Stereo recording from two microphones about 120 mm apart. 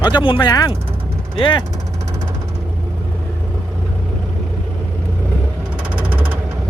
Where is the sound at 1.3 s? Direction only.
45° left (ahead or behind).